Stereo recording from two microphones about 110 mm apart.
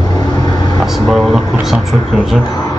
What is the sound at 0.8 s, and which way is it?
Vehicle, centre (ahead or behind).